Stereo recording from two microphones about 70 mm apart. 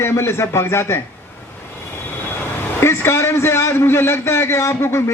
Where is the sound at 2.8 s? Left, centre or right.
Left.